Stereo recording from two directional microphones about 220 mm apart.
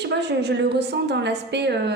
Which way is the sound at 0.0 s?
50° right (ahead or behind).